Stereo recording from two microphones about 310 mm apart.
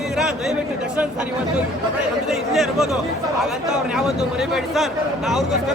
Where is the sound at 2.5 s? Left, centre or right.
Centre.